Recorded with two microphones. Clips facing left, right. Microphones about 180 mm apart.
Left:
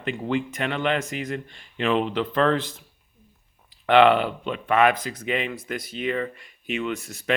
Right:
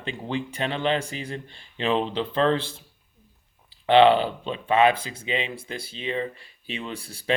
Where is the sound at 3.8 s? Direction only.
30° right (ahead or behind).